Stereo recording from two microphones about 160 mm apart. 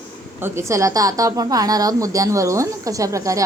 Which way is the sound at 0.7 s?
20° right (ahead or behind).